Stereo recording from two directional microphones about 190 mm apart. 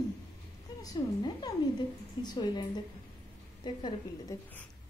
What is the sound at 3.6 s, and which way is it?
Speech, 25° left (ahead or behind).